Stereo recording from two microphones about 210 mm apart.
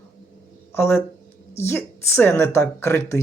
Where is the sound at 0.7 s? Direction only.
10° left (ahead or behind).